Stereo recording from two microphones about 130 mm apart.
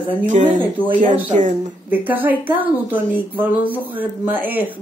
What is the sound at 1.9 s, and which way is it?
Speech, 15° right (ahead or behind).